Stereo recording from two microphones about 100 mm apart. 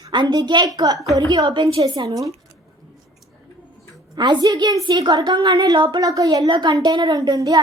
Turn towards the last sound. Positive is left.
turn(degrees=-40)  # may be behind; listen again after turning